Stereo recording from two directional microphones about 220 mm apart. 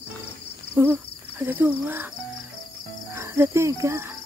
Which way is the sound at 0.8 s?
10° right (ahead or behind).